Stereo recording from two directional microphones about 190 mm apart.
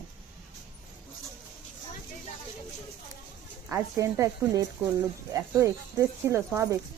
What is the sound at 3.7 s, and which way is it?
Speech, 15° right (ahead or behind).